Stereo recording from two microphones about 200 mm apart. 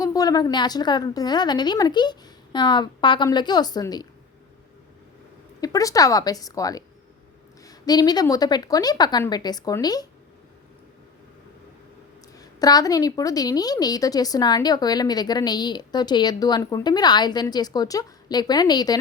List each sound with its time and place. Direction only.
0.0 s a woman's voice: 20° left (ahead or behind)
5.5 s a woman's voice: 20° left (ahead or behind)
12.4 s a woman's voice: 20° left (ahead or behind)